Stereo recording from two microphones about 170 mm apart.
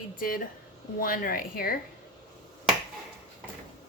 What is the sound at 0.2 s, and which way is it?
A woman's voice, 60° left (ahead or behind).